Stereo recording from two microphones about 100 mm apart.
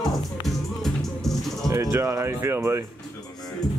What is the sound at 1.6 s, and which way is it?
Speech, 35° right (ahead or behind).